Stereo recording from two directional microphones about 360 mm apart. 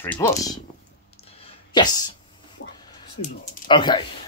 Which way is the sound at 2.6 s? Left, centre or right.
Left.